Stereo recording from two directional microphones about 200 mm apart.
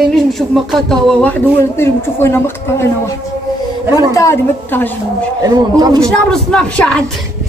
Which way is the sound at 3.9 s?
15° left (ahead or behind).